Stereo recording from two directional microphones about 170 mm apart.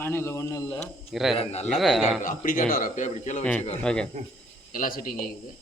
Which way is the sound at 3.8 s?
5° left (ahead or behind).